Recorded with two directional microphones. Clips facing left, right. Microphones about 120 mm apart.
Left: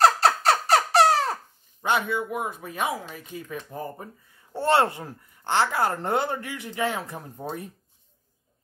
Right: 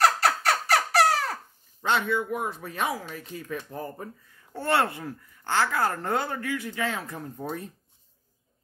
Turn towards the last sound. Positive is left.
turn(degrees=20)  # may be behind; listen again after turning